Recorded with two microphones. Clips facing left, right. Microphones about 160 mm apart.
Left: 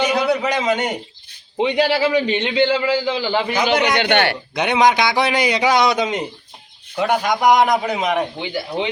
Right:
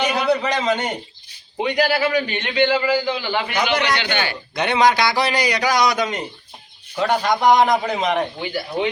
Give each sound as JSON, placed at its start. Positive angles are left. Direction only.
{"t": 0.2, "sound": "a man's voice", "side_deg": 10}
{"t": 1.5, "sound": "a man's voice", "side_deg": 25}
{"t": 3.9, "sound": "a man's voice", "side_deg": 60}
{"t": 4.5, "sound": "a man's voice", "side_deg": 15}
{"t": 8.4, "sound": "a man's voice", "side_deg": 20}